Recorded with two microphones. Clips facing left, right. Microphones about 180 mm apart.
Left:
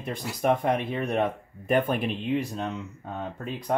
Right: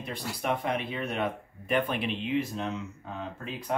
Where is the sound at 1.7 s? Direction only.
45° left (ahead or behind).